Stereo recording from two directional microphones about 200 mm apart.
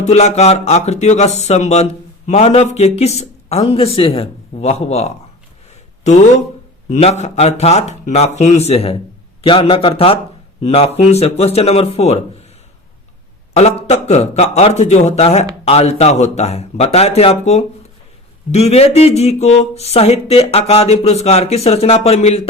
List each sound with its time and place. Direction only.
0.0 s speech: 35° left (ahead or behind)
6.9 s a man's voice: 35° left (ahead or behind)
13.6 s speech: 30° left (ahead or behind)